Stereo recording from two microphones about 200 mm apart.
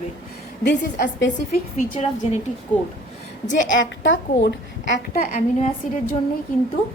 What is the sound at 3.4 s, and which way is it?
A woman's voice, 70° left (ahead or behind).